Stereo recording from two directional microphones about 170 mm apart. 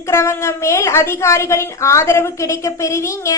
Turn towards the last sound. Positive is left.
turn(degrees=15)  # may be behind; listen again after turning